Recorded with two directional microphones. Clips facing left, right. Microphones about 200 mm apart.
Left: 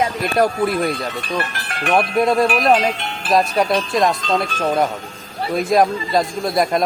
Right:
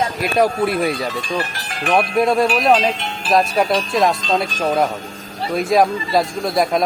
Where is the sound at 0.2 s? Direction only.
5° right (ahead or behind).